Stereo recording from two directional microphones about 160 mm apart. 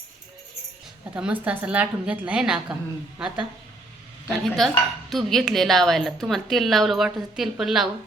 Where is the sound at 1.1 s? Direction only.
10° right (ahead or behind).